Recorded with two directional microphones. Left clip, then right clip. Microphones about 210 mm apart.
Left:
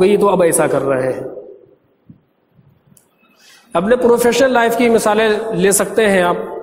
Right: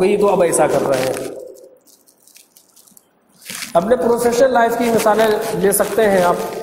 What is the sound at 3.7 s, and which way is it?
A man's voice, 45° left (ahead or behind).